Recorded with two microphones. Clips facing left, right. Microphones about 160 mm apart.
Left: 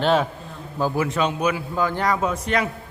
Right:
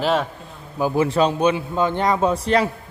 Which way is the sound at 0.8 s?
15° right (ahead or behind).